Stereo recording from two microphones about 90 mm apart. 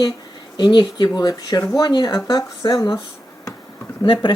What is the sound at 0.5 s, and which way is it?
Speech, 60° left (ahead or behind).